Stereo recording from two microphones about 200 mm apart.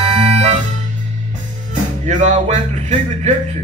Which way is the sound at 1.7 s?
35° right (ahead or behind).